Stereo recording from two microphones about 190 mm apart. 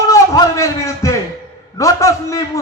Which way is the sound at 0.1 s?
15° left (ahead or behind).